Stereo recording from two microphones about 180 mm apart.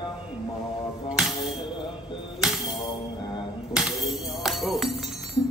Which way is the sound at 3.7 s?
Centre (ahead or behind).